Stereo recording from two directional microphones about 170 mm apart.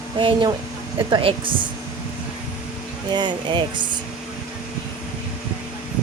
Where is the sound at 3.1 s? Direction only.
25° right (ahead or behind).